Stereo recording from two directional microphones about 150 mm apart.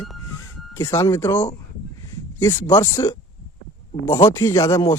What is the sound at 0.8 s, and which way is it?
Speech, 20° left (ahead or behind).